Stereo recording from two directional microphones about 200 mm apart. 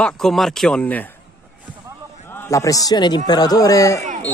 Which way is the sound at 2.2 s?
10° left (ahead or behind).